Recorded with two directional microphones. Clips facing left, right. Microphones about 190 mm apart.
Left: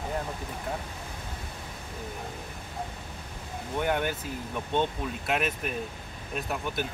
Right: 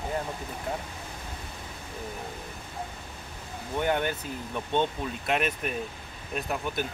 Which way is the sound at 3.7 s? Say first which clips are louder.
Right 1 dB; centre (ahead or behind).